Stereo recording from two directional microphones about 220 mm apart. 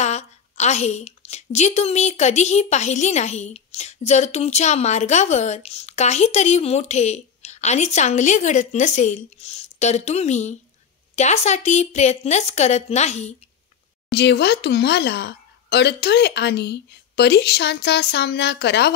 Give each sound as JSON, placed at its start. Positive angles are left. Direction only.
{"t": 0.0, "sound": "a woman's voice", "side_deg": 30}
{"t": 14.1, "sound": "a woman's voice", "side_deg": 50}